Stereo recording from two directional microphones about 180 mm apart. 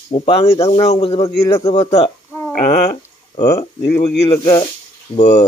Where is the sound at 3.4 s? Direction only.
20° left (ahead or behind).